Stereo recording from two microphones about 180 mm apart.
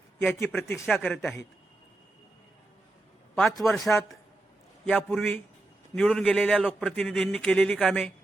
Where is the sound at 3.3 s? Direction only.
Centre (ahead or behind).